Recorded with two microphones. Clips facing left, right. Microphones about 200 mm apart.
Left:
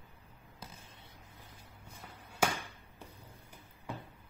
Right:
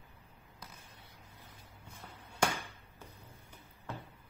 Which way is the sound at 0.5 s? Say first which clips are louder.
Left 2 dB; 25° left (ahead or behind).